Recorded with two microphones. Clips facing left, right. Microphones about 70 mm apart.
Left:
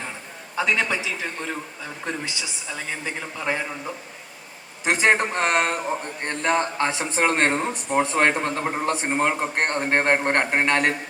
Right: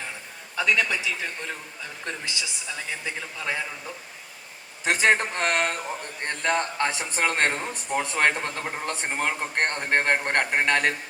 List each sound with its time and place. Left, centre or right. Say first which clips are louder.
0.5 s speech: left 1 dB; left
1.2 s a woman's voice: left 3 dB; centre
2.6 s a woman's voice: left 4 dB; centre
4.9 s a woman's voice: left 2 dB; centre
5.1 s speech: left 3 dB; left